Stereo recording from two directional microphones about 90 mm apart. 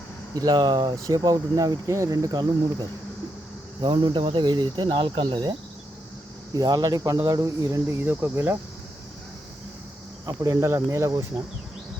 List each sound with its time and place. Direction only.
0.3 s speech: 50° right (ahead or behind)
1.0 s speech: 40° right (ahead or behind)
3.8 s speech: 60° right (ahead or behind); by 8.5 s 25° right (ahead or behind)
10.2 s speech: 40° right (ahead or behind)